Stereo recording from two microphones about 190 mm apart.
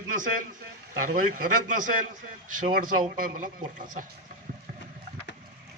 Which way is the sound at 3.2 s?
45° right (ahead or behind).